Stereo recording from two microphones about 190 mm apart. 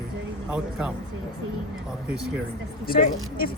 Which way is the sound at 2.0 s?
5° right (ahead or behind).